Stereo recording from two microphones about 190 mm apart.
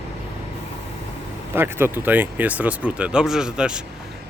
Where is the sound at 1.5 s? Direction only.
10° right (ahead or behind).